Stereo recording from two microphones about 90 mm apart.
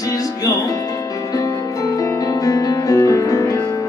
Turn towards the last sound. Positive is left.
turn(degrees=40)  # may be behind; listen again after turning